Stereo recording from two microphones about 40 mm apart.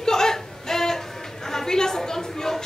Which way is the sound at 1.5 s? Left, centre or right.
Centre.